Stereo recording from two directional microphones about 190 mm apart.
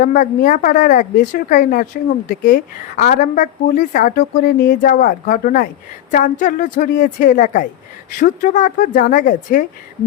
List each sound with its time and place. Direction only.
0.0 s a woman's voice: 45° left (ahead or behind)